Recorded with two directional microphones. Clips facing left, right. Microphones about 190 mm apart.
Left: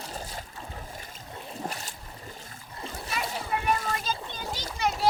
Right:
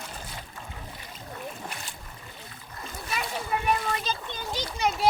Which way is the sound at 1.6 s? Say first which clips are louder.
Left 3 dB; 40° left (ahead or behind).